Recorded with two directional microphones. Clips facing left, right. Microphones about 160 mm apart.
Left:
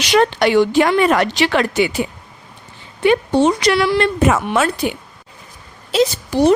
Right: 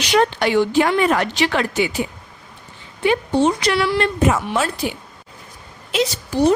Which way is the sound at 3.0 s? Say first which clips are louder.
Left 3 dB; 70° left (ahead or behind).